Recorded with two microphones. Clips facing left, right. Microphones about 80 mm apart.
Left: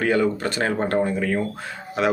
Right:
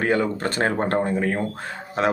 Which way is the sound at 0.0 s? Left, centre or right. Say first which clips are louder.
Left 1 dB; right.